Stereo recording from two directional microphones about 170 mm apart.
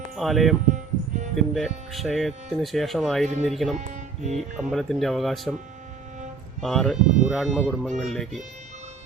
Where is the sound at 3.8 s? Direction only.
40° right (ahead or behind).